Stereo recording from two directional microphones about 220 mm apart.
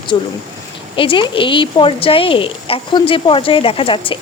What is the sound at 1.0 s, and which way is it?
A woman's voice, 20° left (ahead or behind).